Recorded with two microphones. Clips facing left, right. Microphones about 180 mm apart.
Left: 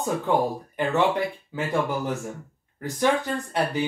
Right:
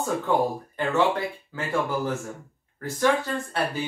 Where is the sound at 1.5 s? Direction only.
15° left (ahead or behind).